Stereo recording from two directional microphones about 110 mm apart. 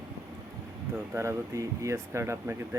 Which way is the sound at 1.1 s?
25° right (ahead or behind).